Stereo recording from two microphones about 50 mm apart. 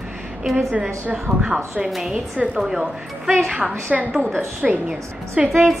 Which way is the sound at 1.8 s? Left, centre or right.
Centre.